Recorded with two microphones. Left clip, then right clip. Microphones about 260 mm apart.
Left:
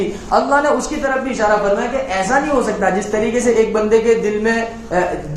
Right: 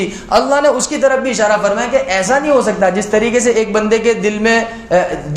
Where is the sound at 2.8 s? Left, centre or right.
Right.